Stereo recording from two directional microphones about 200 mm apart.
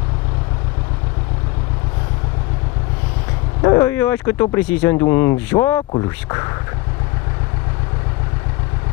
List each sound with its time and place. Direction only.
3.6 s speech: 15° left (ahead or behind)